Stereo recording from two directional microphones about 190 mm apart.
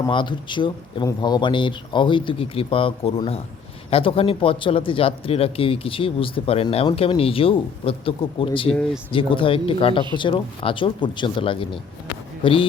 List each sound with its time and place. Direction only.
0.0 s speech: 25° left (ahead or behind)